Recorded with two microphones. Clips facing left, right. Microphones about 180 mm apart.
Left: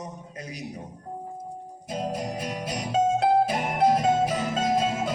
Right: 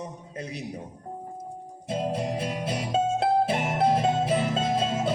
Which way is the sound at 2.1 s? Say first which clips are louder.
Right 2 dB; 30° right (ahead or behind).